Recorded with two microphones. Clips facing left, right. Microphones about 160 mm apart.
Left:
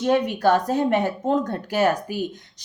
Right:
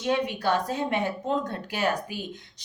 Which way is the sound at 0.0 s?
45° left (ahead or behind).